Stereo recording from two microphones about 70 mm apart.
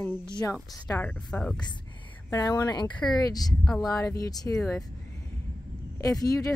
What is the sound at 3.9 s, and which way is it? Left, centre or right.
Speech, left.